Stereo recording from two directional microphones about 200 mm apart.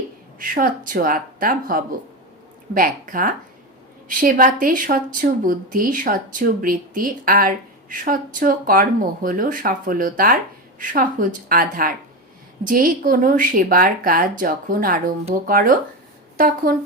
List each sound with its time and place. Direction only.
0.3 s speech: 45° right (ahead or behind)